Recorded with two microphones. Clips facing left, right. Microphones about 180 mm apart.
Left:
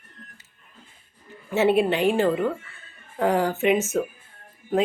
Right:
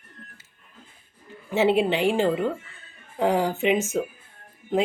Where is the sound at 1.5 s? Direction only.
15° right (ahead or behind).